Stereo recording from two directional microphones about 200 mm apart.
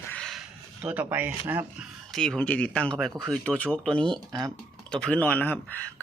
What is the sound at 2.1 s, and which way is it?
Speech, 5° left (ahead or behind).